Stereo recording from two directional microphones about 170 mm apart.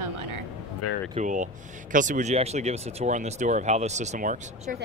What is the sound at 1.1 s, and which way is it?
Speech, 50° right (ahead or behind).